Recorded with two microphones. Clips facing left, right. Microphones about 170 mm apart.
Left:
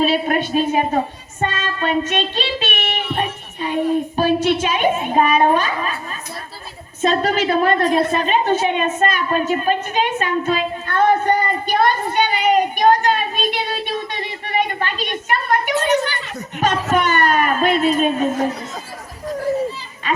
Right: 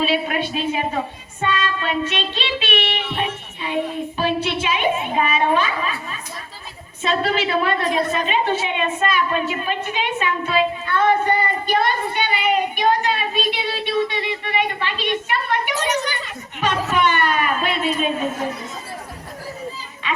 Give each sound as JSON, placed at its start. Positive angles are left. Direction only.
{"t": 0.0, "sound": "a woman's voice", "side_deg": 45}
{"t": 20.0, "sound": "music", "side_deg": 40}